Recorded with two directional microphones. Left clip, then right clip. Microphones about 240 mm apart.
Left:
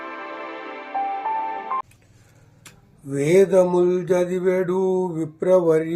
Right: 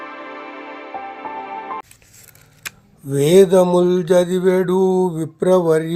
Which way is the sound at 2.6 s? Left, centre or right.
Right.